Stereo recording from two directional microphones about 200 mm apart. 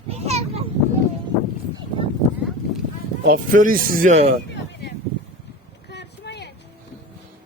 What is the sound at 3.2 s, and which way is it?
Speech, 45° right (ahead or behind).